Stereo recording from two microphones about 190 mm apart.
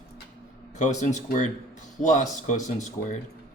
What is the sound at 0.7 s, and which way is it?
Speech, 40° left (ahead or behind).